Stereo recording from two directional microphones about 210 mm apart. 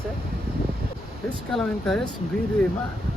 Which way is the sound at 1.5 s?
Centre (ahead or behind).